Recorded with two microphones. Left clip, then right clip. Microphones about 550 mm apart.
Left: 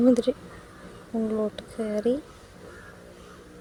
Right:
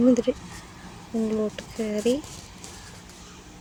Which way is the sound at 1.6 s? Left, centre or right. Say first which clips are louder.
Right 1 dB; left.